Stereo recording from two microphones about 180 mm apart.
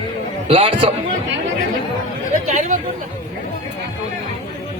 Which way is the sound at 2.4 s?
45° right (ahead or behind).